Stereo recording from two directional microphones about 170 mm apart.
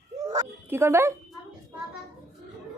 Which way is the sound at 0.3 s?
20° right (ahead or behind).